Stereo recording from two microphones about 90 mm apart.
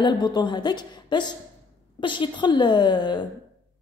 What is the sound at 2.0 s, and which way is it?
A woman's voice, 65° left (ahead or behind).